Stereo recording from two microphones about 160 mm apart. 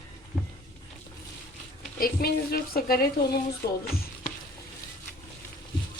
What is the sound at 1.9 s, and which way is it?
Speech, 70° left (ahead or behind).